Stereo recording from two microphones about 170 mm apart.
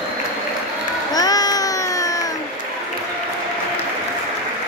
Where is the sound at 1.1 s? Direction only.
20° left (ahead or behind).